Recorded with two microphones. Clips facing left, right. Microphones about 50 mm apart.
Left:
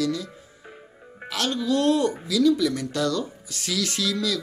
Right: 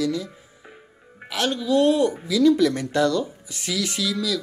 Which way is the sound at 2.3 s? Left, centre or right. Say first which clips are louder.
Right 3 dB; right.